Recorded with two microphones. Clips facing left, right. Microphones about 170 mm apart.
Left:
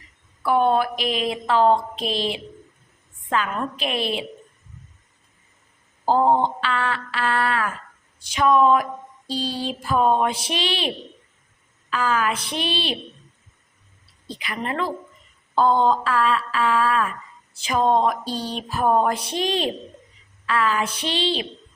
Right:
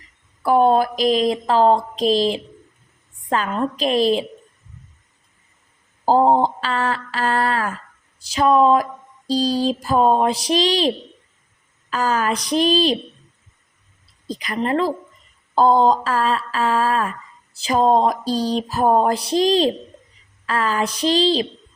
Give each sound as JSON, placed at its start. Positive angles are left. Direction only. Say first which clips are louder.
{"t": 0.4, "sound": "speech", "louder": "right 4 dB", "side_deg": -35}
{"t": 6.1, "sound": "speech", "louder": "right 3 dB", "side_deg": -35}
{"t": 14.3, "sound": "speech", "louder": "right 7 dB", "side_deg": -40}